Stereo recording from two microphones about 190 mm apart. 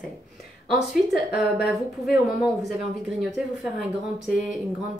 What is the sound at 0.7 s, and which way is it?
Speech, centre (ahead or behind).